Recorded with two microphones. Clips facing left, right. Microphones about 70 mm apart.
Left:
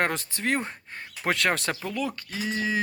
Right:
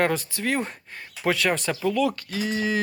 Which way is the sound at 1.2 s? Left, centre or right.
Left.